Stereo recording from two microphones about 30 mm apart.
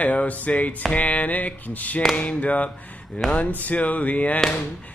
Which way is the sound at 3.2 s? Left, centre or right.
Left.